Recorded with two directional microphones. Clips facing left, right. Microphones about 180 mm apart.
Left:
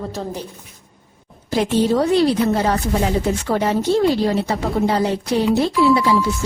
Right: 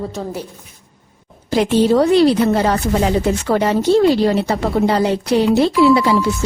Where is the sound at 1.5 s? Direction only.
80° right.